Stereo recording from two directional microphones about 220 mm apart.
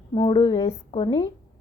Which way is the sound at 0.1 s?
20° left (ahead or behind).